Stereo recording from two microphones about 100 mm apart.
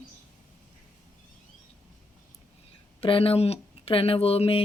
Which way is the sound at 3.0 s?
65° left (ahead or behind).